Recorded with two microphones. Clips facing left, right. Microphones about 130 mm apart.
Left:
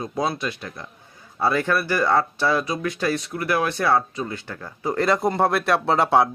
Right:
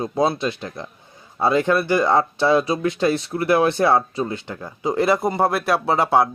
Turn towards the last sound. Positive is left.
turn(degrees=0)  # may be behind; listen again after turning